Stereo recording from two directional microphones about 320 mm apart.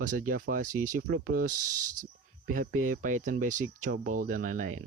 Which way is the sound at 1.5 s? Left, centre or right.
Right.